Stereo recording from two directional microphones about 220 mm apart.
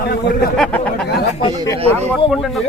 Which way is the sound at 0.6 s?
5° left (ahead or behind).